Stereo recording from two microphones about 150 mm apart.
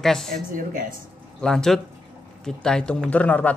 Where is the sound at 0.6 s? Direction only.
65° right (ahead or behind).